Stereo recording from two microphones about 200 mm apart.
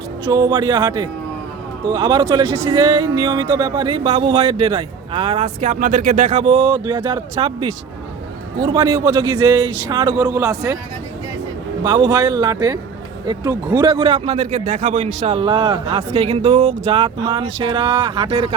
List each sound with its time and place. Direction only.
0.3 s speech: 20° right (ahead or behind)
11.8 s speech: 20° right (ahead or behind)